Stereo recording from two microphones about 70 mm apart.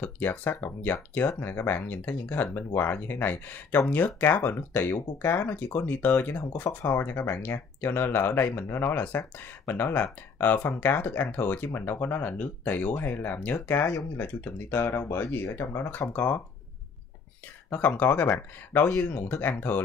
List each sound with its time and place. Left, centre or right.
0.0 s speech: left
17.6 s speech: left
18.9 s speech: centre